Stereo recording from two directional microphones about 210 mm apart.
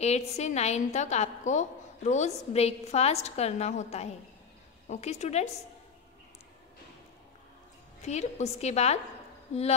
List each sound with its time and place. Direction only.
0.0 s a woman's voice: 30° left (ahead or behind)
8.0 s a woman's voice: 35° left (ahead or behind)